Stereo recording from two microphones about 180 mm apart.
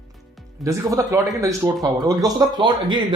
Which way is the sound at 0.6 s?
15° right (ahead or behind).